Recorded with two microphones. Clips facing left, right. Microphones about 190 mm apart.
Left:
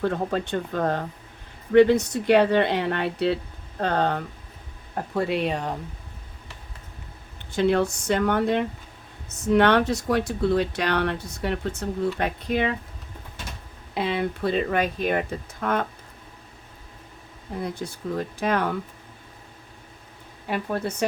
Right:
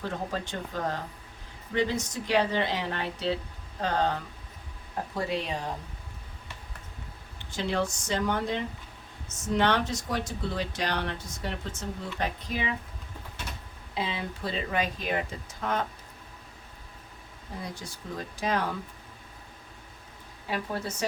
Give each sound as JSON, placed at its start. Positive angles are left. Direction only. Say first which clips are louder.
{"t": 0.0, "sound": "speech", "louder": "left 8 dB", "side_deg": 60}
{"t": 7.5, "sound": "speech", "louder": "left 8 dB", "side_deg": 55}
{"t": 13.9, "sound": "speech", "louder": "left 7 dB", "side_deg": 60}
{"t": 17.6, "sound": "speech", "louder": "left 10 dB", "side_deg": 55}
{"t": 20.5, "sound": "speech", "louder": "left 5 dB", "side_deg": 60}